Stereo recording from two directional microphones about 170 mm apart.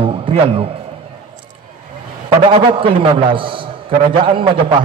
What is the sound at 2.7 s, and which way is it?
A man's voice, 30° right (ahead or behind).